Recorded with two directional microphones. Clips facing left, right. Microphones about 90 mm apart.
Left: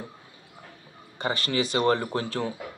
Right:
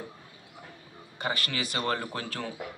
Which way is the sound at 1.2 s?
30° left (ahead or behind).